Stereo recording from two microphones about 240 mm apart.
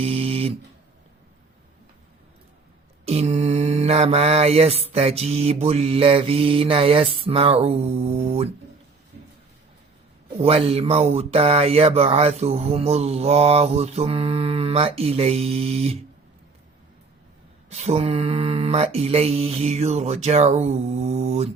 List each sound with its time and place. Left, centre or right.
0.0 s a sound: right
3.1 s speech: right
10.4 s speech: right
17.7 s speech: right